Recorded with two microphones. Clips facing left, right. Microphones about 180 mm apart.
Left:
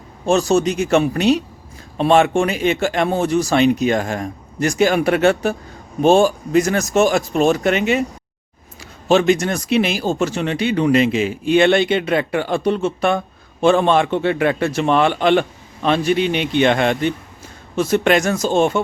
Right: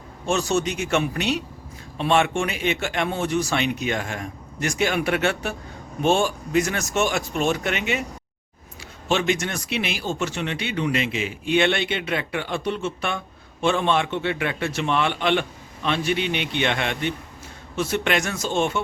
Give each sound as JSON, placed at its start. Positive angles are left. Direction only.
{"t": 0.3, "sound": "speech", "side_deg": 35}
{"t": 9.0, "sound": "speech", "side_deg": 35}